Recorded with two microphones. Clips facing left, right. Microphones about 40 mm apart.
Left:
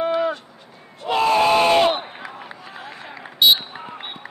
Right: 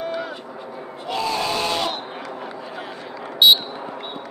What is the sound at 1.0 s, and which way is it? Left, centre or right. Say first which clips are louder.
Battle cry: left 7 dB; left.